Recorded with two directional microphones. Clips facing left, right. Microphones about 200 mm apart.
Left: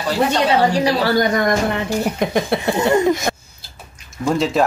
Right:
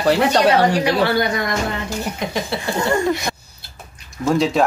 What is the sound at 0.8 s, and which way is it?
Speech, 40° left (ahead or behind).